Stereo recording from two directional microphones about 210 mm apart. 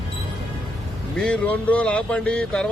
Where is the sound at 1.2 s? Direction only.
5° left (ahead or behind).